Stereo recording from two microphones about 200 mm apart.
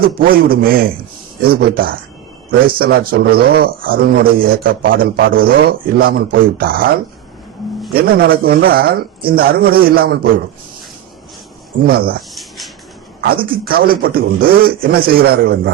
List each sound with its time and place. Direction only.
0.0 s a man's voice: 45° right (ahead or behind)
11.9 s a man's voice: 50° right (ahead or behind)
12.3 s a sound: centre (ahead or behind)
13.2 s a man's voice: 45° right (ahead or behind)